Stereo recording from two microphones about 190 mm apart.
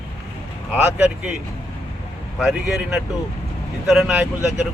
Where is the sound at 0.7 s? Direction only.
5° right (ahead or behind).